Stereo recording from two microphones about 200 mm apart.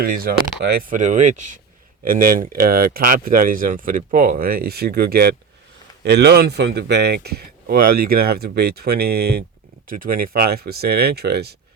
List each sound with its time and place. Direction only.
0.0 s speech: 45° right (ahead or behind)